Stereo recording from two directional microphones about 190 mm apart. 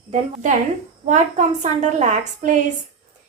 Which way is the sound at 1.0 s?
40° right (ahead or behind).